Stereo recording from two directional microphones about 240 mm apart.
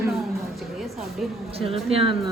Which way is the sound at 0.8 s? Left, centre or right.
Centre.